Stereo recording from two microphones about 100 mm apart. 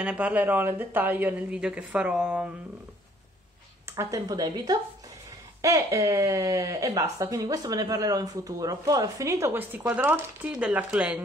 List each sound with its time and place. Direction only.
0.0 s speech: 10° right (ahead or behind)
3.9 s speech: 25° right (ahead or behind)
4.3 s speech: 40° right (ahead or behind); by 11.2 s 15° right (ahead or behind)